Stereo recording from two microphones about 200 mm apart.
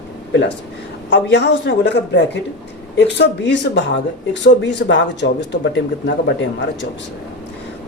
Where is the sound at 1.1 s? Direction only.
60° left (ahead or behind).